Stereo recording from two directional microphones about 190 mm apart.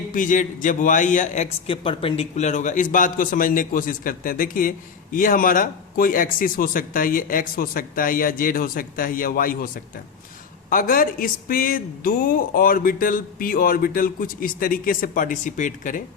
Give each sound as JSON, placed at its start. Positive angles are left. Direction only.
{"t": 0.1, "sound": "a man's voice", "side_deg": 45}